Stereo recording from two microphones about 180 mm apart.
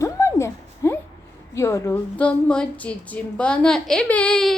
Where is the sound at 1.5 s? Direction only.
15° left (ahead or behind).